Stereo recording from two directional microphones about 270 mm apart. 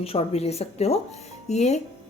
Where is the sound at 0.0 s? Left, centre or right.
Left.